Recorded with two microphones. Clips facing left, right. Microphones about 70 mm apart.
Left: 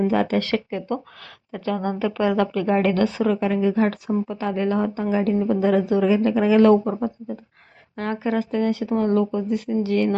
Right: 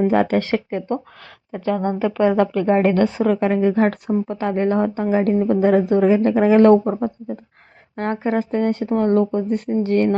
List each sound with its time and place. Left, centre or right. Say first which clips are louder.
0.1 s speech: right 3 dB; right
7.9 s speech: right 3 dB; right